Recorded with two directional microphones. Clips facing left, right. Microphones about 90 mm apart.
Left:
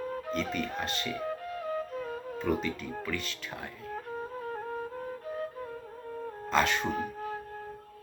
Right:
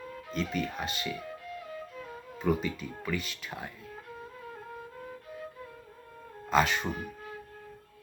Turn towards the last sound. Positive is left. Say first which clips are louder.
# right 1 dB
turn(degrees=0)  # may be behind; listen again after turning